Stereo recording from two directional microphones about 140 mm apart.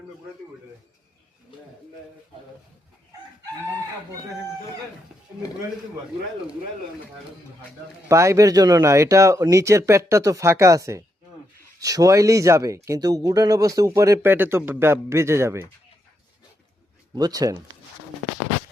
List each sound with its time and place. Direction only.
8.0 s speech: 20° right (ahead or behind)
17.2 s speech: 25° right (ahead or behind)